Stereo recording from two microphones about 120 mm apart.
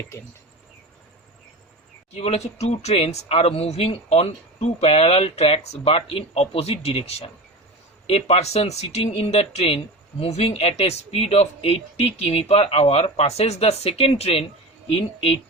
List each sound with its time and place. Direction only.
2.1 s speech: 60° left (ahead or behind)